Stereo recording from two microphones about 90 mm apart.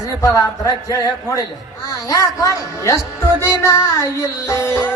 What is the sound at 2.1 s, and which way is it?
Music, 40° left (ahead or behind).